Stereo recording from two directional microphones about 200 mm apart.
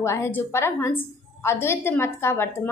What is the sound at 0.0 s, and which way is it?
A woman's voice, 15° left (ahead or behind).